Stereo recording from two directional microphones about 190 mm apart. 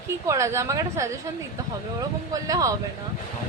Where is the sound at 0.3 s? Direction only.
15° right (ahead or behind).